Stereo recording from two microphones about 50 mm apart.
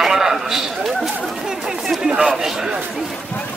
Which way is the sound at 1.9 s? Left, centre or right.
Centre.